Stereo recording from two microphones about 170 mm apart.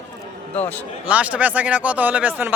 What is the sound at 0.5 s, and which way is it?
Speech, 10° left (ahead or behind).